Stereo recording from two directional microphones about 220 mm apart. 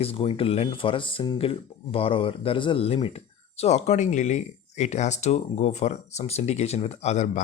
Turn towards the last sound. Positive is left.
turn(degrees=30)  # may be behind; listen again after turning